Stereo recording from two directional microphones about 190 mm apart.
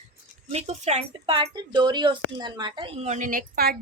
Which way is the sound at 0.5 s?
35° right (ahead or behind).